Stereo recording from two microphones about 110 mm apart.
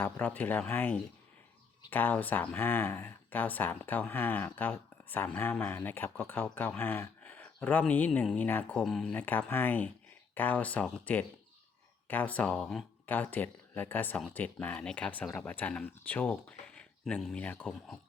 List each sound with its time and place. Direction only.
0.0 s speech: 15° left (ahead or behind)
8.8 s speech: 5° left (ahead or behind)
9.1 s speech: 15° left (ahead or behind)
13.1 s speech: 15° left (ahead or behind)